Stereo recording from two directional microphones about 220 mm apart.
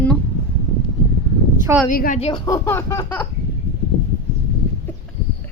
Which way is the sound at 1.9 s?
40° left (ahead or behind).